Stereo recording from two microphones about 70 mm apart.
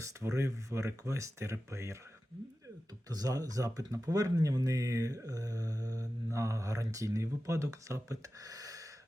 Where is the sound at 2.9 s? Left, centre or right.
Right.